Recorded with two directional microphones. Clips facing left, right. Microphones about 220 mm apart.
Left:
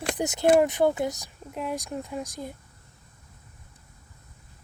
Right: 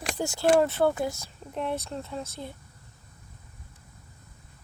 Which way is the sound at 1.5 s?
5° left (ahead or behind).